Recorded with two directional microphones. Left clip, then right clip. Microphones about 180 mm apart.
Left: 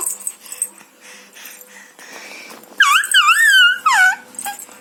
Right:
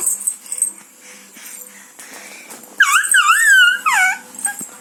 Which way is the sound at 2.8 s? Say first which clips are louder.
Left 1 dB; centre (ahead or behind).